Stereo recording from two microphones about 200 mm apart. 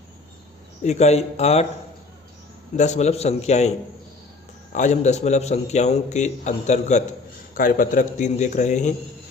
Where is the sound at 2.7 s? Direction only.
35° left (ahead or behind).